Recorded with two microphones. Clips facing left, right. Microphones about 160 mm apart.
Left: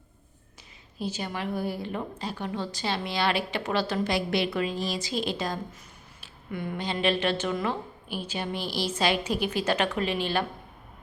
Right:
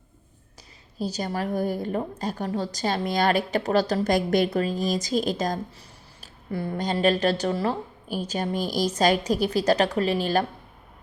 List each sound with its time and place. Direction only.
0.9 s a woman's voice: 40° right (ahead or behind)